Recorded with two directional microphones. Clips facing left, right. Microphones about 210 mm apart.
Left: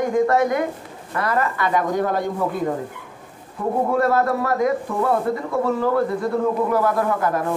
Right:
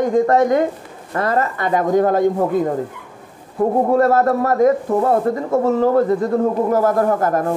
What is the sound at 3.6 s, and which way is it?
Speech, 40° right (ahead or behind).